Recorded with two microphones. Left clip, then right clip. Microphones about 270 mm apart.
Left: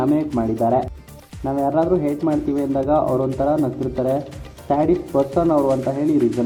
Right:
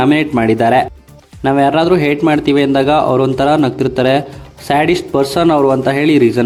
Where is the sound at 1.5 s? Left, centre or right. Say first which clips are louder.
Right 8 dB; right.